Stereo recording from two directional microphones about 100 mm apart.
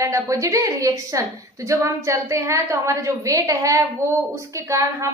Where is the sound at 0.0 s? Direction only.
30° right (ahead or behind).